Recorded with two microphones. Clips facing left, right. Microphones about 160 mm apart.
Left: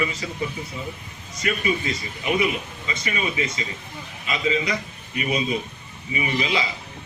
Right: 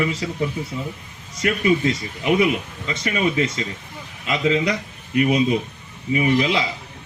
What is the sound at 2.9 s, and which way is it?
A man's voice, 70° right (ahead or behind).